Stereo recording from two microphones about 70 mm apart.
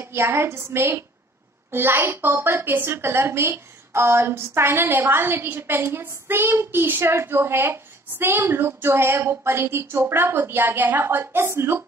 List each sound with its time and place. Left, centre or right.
0.0 s a woman's voice: right